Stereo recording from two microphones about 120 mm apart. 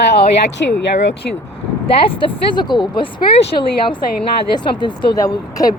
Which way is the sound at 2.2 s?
40° left (ahead or behind).